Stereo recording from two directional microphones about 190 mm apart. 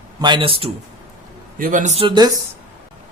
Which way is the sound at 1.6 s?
45° right (ahead or behind).